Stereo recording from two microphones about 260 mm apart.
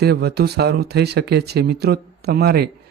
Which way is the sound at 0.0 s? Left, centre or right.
Right.